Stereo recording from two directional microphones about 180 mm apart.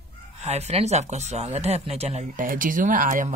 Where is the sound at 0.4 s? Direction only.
35° right (ahead or behind).